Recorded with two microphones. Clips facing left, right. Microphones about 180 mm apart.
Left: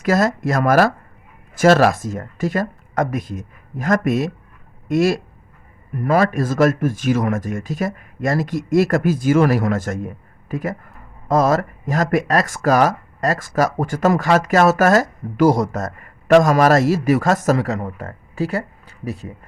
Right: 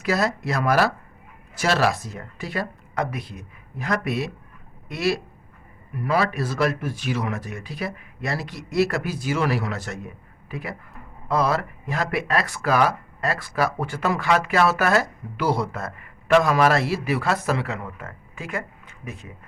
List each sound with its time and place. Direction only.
0.0 s speech: 45° left (ahead or behind)